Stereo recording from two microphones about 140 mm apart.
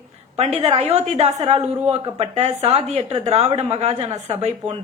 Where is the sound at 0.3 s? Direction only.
50° right (ahead or behind).